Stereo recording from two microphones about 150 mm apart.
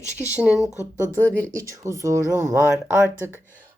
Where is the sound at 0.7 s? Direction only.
15° left (ahead or behind).